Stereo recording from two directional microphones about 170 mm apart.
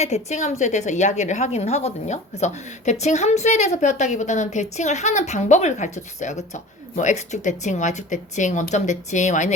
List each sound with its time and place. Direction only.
0.0 s a woman's voice: 40° left (ahead or behind)